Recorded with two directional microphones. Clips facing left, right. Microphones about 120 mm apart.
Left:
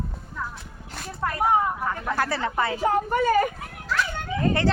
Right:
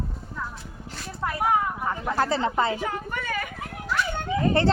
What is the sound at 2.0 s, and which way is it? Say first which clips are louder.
Speech: right 3 dB; 25° right (ahead or behind).